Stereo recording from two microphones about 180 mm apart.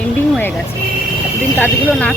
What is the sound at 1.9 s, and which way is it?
Speech, 5° left (ahead or behind).